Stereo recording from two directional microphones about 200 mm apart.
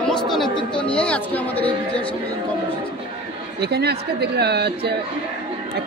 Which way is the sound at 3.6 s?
55° right (ahead or behind).